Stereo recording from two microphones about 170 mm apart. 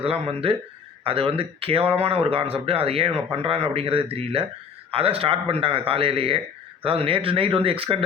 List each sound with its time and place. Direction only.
0.0 s a man's voice: 35° right (ahead or behind)